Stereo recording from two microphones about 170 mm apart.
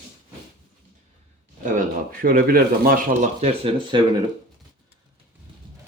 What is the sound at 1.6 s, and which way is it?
Speech, 55° right (ahead or behind).